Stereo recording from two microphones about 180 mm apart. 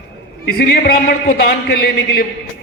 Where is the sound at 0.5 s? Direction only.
55° left (ahead or behind).